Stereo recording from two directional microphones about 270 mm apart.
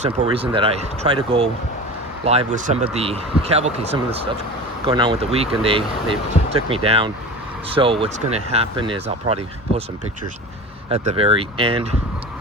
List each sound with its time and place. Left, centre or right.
0.0 s speech: right
10.8 s speech: right